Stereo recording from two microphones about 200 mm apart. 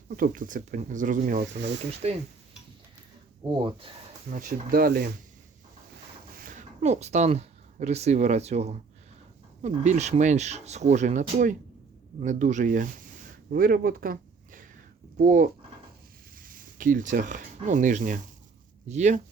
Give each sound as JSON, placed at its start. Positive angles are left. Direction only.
{"t": 0.2, "sound": "speech", "side_deg": -40}
{"t": 3.4, "sound": "speech", "side_deg": -25}
{"t": 4.3, "sound": "speech", "side_deg": -40}
{"t": 6.3, "sound": "speech", "side_deg": -45}